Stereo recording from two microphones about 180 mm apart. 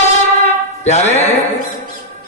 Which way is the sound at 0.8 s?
40° left (ahead or behind).